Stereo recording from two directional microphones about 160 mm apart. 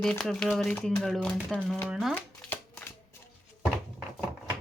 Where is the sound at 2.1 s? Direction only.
10° left (ahead or behind).